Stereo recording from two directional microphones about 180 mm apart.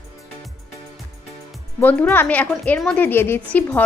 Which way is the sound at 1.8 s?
10° left (ahead or behind).